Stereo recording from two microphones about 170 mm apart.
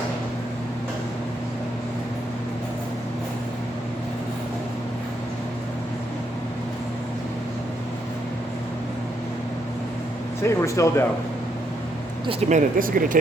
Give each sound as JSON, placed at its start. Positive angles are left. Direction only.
{"t": 10.4, "sound": "speech", "side_deg": 15}
{"t": 12.5, "sound": "speech", "side_deg": -50}